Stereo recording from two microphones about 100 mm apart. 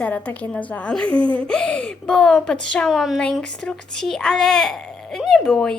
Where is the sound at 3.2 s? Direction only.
10° left (ahead or behind).